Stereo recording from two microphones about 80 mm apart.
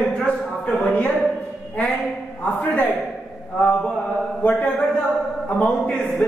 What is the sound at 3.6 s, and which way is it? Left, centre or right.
Speech, centre.